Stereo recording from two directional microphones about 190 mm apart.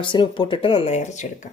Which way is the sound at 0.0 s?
25° left (ahead or behind).